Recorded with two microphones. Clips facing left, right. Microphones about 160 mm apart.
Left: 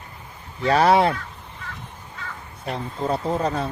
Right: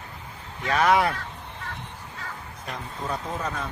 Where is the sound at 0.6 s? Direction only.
35° left (ahead or behind).